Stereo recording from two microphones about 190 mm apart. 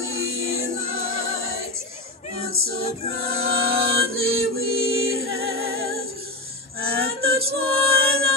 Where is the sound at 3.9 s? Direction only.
90° right.